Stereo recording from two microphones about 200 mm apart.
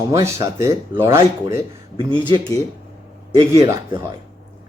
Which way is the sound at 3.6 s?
15° right (ahead or behind).